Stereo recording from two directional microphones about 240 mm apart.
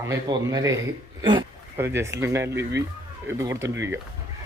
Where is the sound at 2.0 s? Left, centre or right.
Centre.